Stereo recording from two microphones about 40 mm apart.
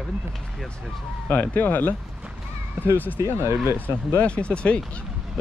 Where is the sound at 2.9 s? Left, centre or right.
Left.